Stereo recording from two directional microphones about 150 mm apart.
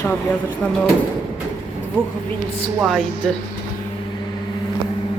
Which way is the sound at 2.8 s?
Centre (ahead or behind).